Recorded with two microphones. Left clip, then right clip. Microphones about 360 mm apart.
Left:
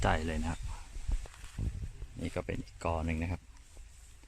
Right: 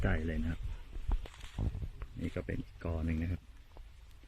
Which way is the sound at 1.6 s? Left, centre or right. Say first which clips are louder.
Right 3 dB; right.